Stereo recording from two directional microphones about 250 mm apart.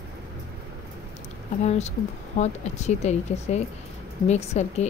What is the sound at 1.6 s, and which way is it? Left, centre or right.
Speech, left.